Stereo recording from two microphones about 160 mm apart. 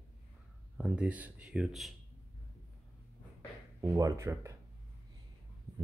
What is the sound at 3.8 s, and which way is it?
Speech, 20° right (ahead or behind).